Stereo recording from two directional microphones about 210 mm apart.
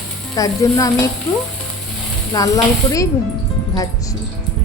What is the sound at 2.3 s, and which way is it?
Speech, 15° left (ahead or behind).